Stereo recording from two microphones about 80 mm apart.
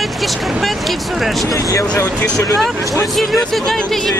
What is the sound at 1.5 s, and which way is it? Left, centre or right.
Speech, left.